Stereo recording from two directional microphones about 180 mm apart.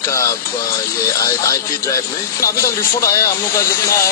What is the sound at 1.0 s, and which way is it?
Speech, 20° left (ahead or behind).